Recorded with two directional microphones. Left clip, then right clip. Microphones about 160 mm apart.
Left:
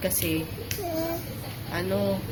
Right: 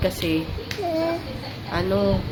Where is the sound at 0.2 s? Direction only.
25° right (ahead or behind).